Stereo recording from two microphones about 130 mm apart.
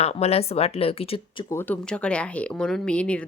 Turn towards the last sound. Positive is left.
turn(degrees=10)  # may be behind; listen again after turning